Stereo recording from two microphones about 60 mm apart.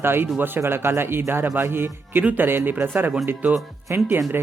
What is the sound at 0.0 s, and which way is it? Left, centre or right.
Speech, right.